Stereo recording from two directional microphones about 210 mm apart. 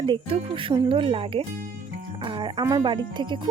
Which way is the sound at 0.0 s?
25° right (ahead or behind).